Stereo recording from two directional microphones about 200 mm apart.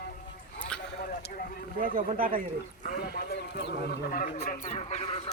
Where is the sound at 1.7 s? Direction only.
45° right (ahead or behind).